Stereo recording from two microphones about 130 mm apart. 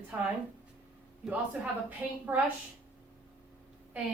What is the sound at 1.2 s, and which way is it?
A woman's voice, 10° right (ahead or behind).